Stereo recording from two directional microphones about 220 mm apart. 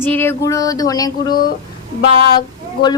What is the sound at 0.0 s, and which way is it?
Speech, 10° left (ahead or behind).